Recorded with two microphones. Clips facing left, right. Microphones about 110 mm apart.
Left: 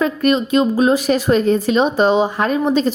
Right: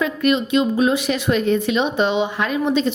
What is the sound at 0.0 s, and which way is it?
Speech, 40° left (ahead or behind).